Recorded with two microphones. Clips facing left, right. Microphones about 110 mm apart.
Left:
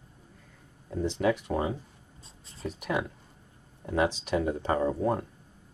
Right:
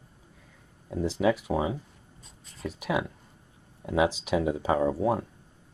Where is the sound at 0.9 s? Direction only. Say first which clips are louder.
Right 2 dB; 5° right (ahead or behind).